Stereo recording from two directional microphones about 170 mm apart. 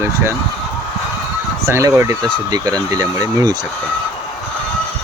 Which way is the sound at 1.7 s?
15° right (ahead or behind).